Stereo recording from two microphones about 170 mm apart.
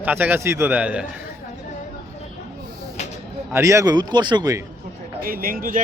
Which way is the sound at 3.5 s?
15° right (ahead or behind).